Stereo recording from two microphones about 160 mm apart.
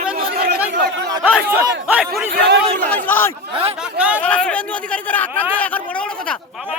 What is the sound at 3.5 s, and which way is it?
Speech, 40° right (ahead or behind).